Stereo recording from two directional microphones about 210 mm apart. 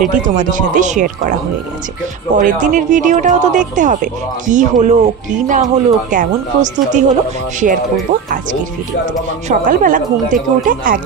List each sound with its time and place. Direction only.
0.2 s speech: 40° right (ahead or behind)
9.5 s speech: 40° right (ahead or behind)